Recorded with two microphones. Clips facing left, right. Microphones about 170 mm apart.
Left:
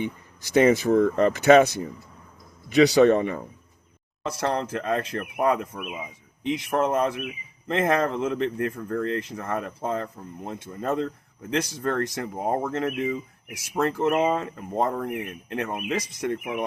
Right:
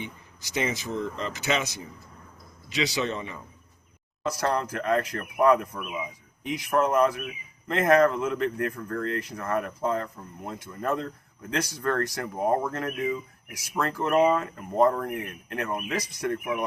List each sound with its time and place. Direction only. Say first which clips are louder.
0.0 s a man's voice: left 8 dB; 50° left (ahead or behind)
4.3 s speech: left 1 dB; 25° left (ahead or behind)